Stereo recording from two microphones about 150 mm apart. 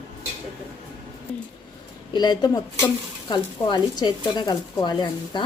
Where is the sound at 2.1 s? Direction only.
30° left (ahead or behind).